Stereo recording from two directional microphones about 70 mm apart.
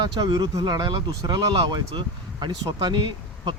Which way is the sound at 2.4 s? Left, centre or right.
Right.